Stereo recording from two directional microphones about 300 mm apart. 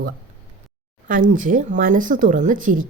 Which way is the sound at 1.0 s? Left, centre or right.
Right.